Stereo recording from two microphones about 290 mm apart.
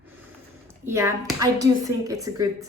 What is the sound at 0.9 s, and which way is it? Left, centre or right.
Speech, centre.